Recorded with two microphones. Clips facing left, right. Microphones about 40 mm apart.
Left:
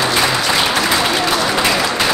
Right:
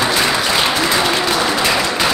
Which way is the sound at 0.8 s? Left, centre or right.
Centre.